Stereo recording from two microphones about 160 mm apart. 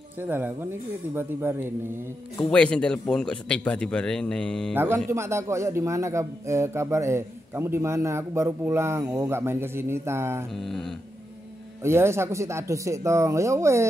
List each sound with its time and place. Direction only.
0.2 s a man's voice: 10° right (ahead or behind)
2.3 s speech: 5° left (ahead or behind)
4.7 s a man's voice: 15° right (ahead or behind)
10.5 s speech: centre (ahead or behind)
11.8 s speech: 15° right (ahead or behind)